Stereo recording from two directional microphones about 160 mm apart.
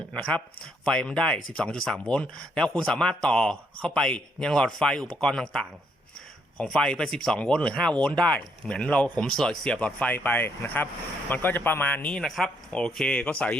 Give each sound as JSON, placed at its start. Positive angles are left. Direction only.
{"t": 0.1, "sound": "speech", "side_deg": 5}